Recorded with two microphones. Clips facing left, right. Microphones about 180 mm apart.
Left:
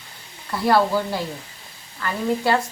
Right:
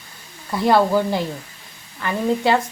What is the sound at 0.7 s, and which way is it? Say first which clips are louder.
A woman's voice: right 3 dB; 20° right (ahead or behind).